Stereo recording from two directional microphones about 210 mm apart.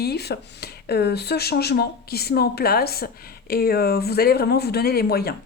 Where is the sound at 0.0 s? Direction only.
50° left (ahead or behind).